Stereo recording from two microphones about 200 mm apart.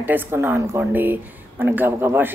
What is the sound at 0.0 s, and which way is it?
A woman's voice, 10° right (ahead or behind).